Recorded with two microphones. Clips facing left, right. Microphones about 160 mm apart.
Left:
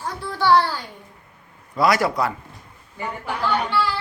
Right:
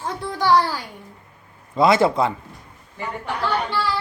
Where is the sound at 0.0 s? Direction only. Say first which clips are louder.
Even; 15° right (ahead or behind).